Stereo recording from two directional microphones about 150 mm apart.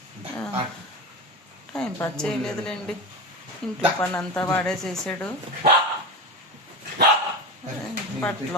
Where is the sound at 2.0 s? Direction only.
10° left (ahead or behind).